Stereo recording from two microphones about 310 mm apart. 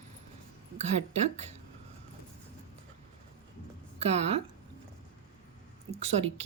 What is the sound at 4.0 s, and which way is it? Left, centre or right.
Speech, centre.